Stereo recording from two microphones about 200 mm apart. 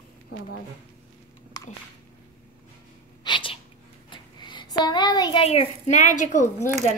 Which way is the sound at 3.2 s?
25° left (ahead or behind).